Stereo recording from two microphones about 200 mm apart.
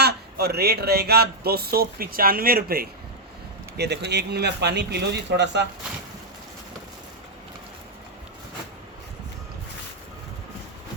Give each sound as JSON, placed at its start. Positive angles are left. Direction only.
{"t": 0.0, "sound": "speech", "side_deg": -55}